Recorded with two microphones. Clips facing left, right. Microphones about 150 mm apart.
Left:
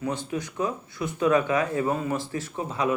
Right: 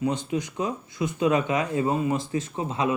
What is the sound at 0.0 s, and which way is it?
Speech, 20° right (ahead or behind).